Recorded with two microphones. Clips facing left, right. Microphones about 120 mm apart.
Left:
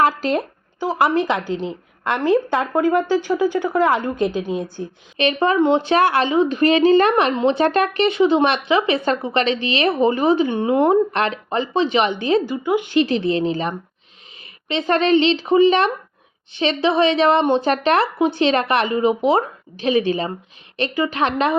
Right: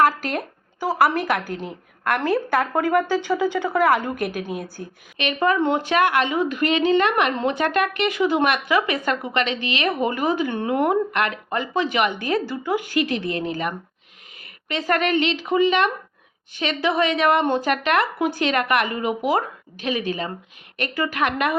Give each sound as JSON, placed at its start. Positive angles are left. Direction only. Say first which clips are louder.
{"t": 0.0, "sound": "a woman's voice", "louder": "left 2 dB", "side_deg": 30}